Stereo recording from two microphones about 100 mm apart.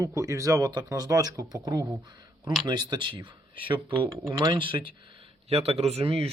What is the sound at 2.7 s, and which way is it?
Speech, 50° right (ahead or behind).